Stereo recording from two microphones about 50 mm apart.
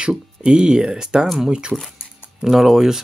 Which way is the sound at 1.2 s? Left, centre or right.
Centre.